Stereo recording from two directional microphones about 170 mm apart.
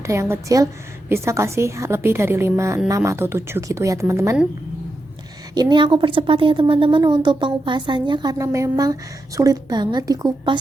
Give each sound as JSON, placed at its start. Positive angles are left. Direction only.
{"t": 0.0, "sound": "a woman's voice", "side_deg": -15}
{"t": 5.5, "sound": "a woman's voice", "side_deg": -25}